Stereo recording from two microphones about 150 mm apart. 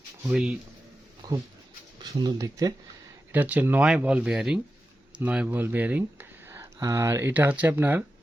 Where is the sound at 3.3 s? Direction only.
10° right (ahead or behind).